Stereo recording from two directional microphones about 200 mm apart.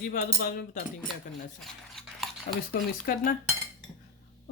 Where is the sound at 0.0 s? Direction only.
45° left (ahead or behind).